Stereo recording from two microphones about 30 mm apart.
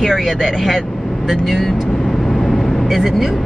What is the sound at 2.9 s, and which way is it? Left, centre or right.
Speech, centre.